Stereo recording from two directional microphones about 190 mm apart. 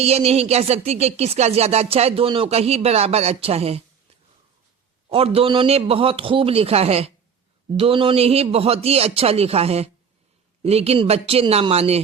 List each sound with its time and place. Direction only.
0.0 s music: 35° right (ahead or behind)
5.0 s music: 30° right (ahead or behind)